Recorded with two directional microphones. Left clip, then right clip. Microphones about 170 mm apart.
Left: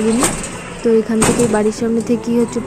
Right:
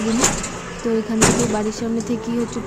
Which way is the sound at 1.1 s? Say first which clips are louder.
Left 4 dB; 25° left (ahead or behind).